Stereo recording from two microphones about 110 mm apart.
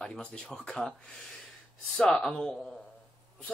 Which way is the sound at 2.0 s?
10° left (ahead or behind).